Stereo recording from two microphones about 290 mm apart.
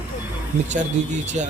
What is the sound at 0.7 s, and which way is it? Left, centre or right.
Speech, right.